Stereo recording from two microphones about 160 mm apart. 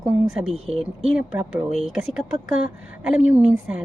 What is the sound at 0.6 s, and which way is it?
Speech, 40° right (ahead or behind).